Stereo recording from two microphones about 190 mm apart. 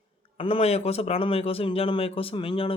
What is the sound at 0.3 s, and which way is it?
Speech, 30° left (ahead or behind).